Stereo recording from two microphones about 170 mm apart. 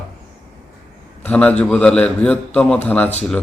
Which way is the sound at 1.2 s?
10° left (ahead or behind).